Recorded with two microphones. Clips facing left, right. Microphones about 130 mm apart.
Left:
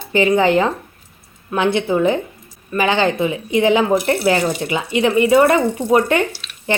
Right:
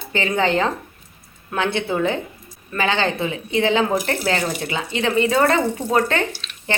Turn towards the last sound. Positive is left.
turn(degrees=15)  # may be behind; listen again after turning